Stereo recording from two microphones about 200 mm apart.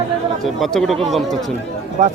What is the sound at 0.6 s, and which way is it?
Speech, centre (ahead or behind).